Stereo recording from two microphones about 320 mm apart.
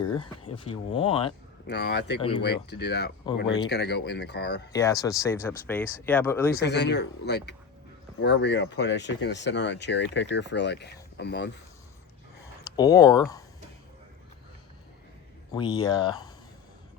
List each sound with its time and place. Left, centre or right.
0.0 s speech: centre
1.6 s speech: left
4.7 s speech: centre
6.7 s speech: left
12.7 s speech: centre
15.5 s speech: centre